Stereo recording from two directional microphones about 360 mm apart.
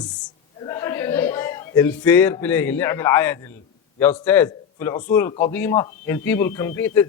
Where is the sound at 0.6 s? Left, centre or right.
Centre.